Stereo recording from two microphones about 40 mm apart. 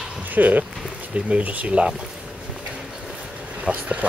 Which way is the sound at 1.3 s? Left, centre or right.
Right.